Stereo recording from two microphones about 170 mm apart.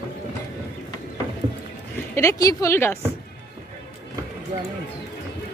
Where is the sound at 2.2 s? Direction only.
20° left (ahead or behind).